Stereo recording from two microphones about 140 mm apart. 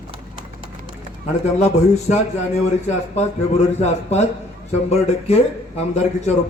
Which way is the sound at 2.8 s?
50° left (ahead or behind).